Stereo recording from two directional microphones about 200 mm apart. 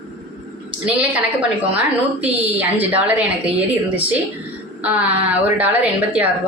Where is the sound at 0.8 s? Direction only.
5° right (ahead or behind).